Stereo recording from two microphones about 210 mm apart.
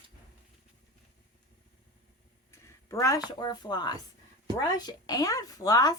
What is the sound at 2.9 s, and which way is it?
Speech, 15° left (ahead or behind).